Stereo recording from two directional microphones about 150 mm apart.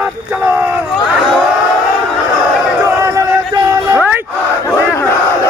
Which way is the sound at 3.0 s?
20° right (ahead or behind).